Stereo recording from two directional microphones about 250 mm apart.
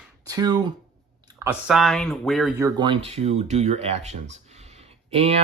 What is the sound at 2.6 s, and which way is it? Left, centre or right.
Speech, centre.